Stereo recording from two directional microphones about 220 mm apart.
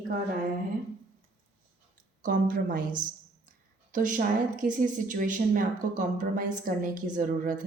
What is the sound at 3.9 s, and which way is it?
Speech, 35° right (ahead or behind).